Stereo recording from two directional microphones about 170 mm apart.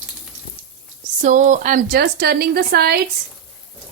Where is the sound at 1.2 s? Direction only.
45° right (ahead or behind); by 2.9 s 65° right (ahead or behind).